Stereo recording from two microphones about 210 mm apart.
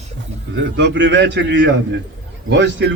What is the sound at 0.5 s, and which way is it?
A man's voice, 55° right (ahead or behind).